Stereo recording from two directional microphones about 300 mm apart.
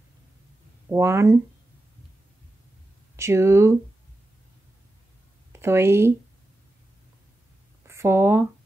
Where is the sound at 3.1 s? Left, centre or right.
Centre.